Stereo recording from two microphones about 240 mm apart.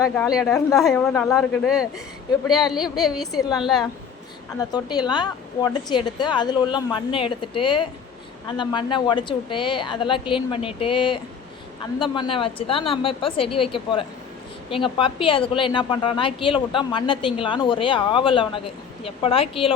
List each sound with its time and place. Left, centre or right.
0.0 s a woman's voice: centre
4.7 s a woman's voice: centre